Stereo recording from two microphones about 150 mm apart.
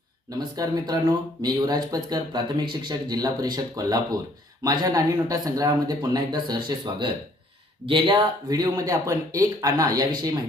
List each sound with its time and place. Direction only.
0.3 s speech: 25° right (ahead or behind)